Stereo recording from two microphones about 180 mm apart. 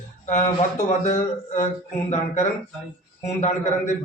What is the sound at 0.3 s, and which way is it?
Speech, 45° left (ahead or behind).